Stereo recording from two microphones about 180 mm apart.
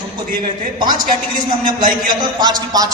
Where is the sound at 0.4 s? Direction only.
25° right (ahead or behind).